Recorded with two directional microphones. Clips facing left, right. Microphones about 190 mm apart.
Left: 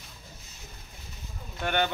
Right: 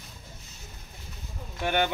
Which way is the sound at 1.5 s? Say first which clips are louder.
Right 1 dB; 10° right (ahead or behind).